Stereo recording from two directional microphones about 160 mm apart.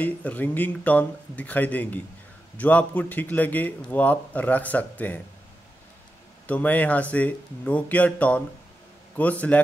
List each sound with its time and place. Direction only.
0.0 s speech: 10° left (ahead or behind)
6.4 s a man's voice: 10° left (ahead or behind)